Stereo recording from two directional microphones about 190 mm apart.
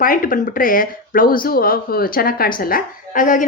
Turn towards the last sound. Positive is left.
turn(degrees=45)  # may be behind; listen again after turning